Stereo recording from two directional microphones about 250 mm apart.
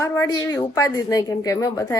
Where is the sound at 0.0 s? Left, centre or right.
Centre.